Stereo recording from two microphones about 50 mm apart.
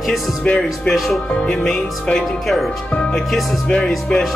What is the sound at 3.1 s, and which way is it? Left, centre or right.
Speech, centre.